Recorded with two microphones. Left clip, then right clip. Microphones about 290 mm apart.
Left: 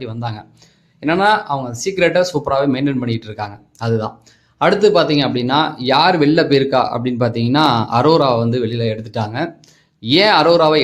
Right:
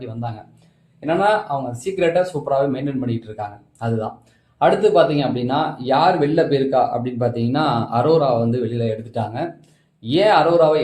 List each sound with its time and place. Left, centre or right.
0.0 s a man's voice: left